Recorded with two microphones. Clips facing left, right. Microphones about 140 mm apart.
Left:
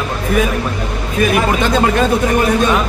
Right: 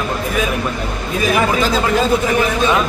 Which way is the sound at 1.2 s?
60° left (ahead or behind).